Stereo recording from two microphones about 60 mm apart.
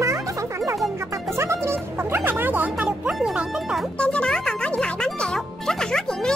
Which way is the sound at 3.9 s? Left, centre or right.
Left.